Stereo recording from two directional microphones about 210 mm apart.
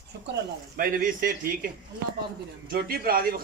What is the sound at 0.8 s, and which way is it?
A man's voice, 40° right (ahead or behind).